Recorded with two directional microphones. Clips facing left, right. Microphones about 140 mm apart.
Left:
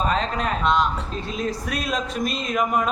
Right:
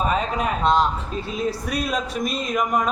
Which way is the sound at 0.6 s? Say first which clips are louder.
Right 2 dB; 35° right (ahead or behind).